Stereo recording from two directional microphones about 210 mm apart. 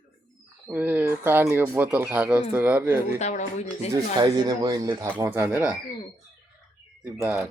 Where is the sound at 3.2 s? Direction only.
35° left (ahead or behind).